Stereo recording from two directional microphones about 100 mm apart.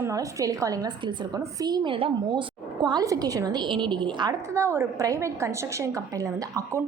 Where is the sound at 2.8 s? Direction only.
40° right (ahead or behind).